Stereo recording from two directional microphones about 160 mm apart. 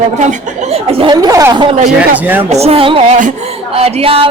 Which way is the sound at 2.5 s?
40° right (ahead or behind).